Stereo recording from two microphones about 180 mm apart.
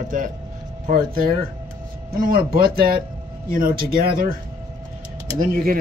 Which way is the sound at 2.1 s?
55° right (ahead or behind).